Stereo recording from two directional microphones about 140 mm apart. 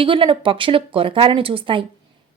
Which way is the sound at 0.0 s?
40° right (ahead or behind).